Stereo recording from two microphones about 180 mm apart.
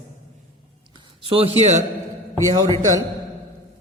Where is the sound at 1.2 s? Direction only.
30° right (ahead or behind).